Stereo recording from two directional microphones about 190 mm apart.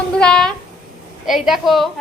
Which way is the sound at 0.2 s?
5° left (ahead or behind).